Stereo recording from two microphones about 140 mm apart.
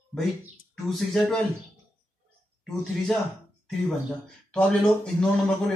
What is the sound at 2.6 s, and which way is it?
Speech, 5° left (ahead or behind).